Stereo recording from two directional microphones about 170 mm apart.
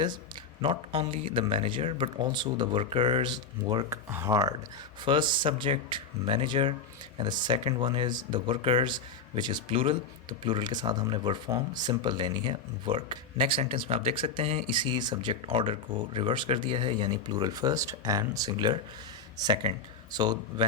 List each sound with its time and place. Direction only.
0.6 s speech: 30° right (ahead or behind)